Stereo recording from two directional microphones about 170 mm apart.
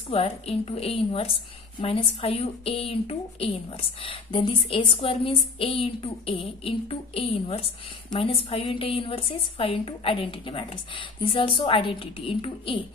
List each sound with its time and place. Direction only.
0.1 s a woman's voice: 35° left (ahead or behind)